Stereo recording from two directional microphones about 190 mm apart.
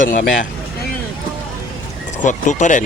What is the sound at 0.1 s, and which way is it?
Speech, 40° left (ahead or behind).